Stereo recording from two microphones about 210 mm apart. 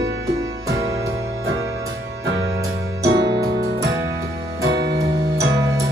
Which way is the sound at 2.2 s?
60° right (ahead or behind).